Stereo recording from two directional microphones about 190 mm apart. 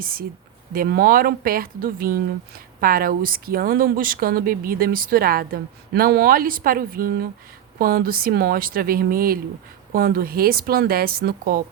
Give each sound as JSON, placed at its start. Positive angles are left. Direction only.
{"t": 0.0, "sound": "speech", "side_deg": -50}